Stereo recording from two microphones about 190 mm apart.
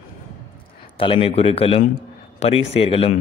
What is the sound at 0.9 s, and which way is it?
Speech, 30° left (ahead or behind).